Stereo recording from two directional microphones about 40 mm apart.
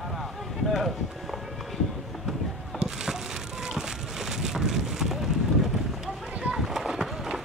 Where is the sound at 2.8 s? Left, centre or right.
Centre.